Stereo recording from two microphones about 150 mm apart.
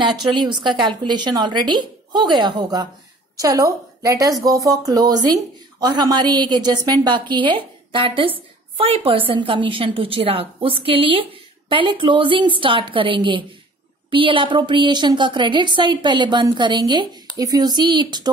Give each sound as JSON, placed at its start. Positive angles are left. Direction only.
{"t": 0.2, "sound": "a woman's voice", "side_deg": -30}